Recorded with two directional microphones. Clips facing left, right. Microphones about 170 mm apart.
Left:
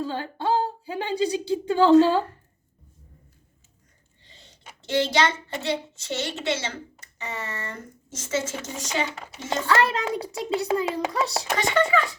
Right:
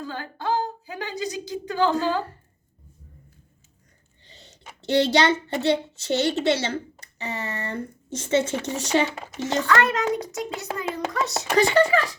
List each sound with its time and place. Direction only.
0.0 s a woman's voice: 30° left (ahead or behind)
4.9 s a child's voice: 35° right (ahead or behind)
8.6 s speech: 70° right (ahead or behind)
9.6 s a child's voice: 30° left (ahead or behind)
11.5 s a child's voice: 35° right (ahead or behind)